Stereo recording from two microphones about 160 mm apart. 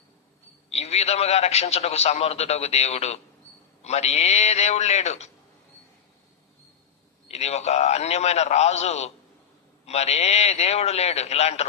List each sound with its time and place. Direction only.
0.7 s a man's voice: 40° left (ahead or behind)
7.3 s a man's voice: 40° left (ahead or behind)